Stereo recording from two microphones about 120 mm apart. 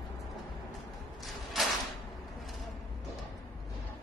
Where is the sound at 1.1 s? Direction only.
Centre (ahead or behind).